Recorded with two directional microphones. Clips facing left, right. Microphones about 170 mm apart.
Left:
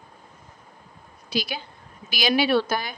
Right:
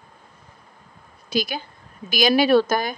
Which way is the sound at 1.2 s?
45° right (ahead or behind).